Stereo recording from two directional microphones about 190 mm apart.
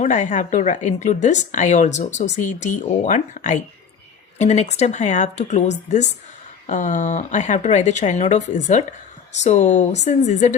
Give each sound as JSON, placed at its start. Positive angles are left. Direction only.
{"t": 0.0, "sound": "a woman's voice", "side_deg": 40}